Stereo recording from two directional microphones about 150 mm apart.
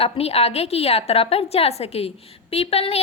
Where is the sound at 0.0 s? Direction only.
40° left (ahead or behind).